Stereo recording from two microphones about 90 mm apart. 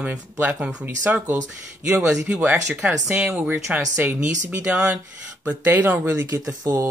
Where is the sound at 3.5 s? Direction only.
25° right (ahead or behind).